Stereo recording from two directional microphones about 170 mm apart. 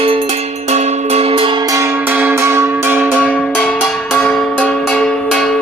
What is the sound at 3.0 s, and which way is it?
Cowbell, centre (ahead or behind).